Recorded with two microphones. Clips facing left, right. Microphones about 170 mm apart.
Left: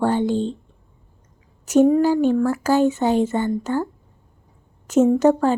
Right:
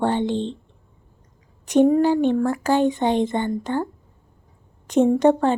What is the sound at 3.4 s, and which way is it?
Speech, 15° right (ahead or behind).